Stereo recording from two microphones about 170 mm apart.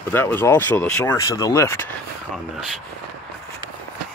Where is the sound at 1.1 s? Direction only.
20° left (ahead or behind).